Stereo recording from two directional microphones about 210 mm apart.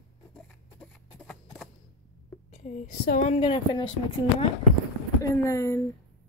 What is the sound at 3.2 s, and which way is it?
Speech, 25° left (ahead or behind).